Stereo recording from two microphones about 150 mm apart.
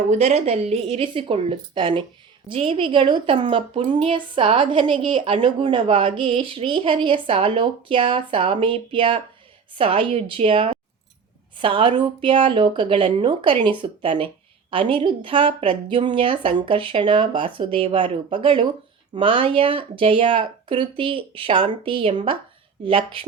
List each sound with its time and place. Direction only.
0.1 s a woman's voice: 50° right (ahead or behind)